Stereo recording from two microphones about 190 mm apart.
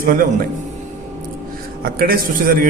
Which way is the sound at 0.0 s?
45° right (ahead or behind).